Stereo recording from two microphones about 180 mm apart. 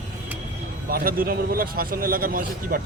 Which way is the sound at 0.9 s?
55° right (ahead or behind).